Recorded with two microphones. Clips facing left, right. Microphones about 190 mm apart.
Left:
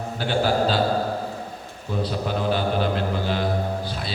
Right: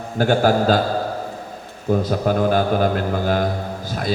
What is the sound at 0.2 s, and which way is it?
Speech, 45° right (ahead or behind).